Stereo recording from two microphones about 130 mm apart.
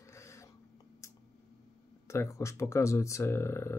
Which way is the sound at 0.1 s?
25° left (ahead or behind).